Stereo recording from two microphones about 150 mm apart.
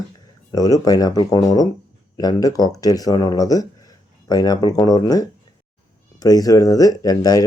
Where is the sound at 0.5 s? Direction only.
25° left (ahead or behind).